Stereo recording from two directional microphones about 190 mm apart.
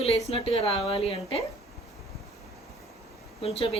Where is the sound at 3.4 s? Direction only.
30° left (ahead or behind).